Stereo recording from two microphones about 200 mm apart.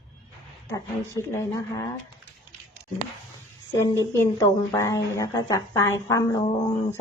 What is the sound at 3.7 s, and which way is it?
A woman's voice, 15° left (ahead or behind).